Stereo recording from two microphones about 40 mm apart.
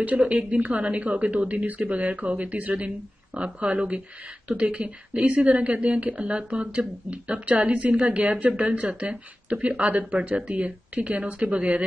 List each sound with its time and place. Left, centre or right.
0.2 s a woman's voice: right